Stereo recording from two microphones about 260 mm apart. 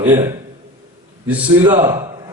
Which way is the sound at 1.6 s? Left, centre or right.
Centre.